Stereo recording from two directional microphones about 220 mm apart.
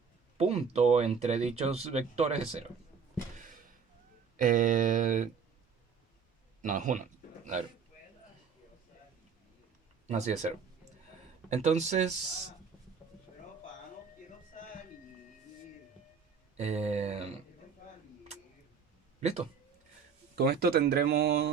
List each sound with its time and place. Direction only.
0.3 s speech: 30° right (ahead or behind)
4.4 s speech: 35° right (ahead or behind)
6.6 s a sound: 35° right (ahead or behind)
10.1 s speech: 30° right (ahead or behind)
16.6 s speech: 30° right (ahead or behind)
20.3 s speech: 45° right (ahead or behind)